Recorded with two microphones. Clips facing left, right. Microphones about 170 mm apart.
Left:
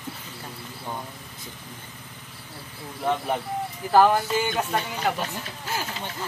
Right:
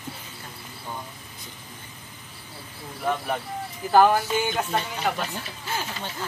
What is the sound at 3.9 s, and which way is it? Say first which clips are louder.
Speech: even; centre (ahead or behind).